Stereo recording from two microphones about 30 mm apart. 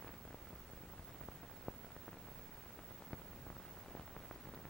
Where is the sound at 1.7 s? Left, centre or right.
Centre.